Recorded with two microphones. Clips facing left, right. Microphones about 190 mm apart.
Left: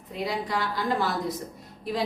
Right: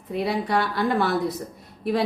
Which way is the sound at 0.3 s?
65° right (ahead or behind).